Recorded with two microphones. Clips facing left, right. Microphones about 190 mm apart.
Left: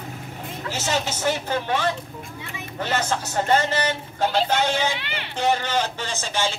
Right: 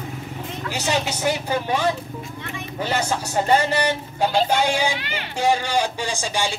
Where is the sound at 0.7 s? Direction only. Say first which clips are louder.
Right 2 dB; 15° right (ahead or behind).